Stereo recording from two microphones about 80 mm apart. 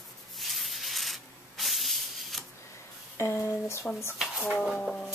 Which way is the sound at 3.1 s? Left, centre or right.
Left.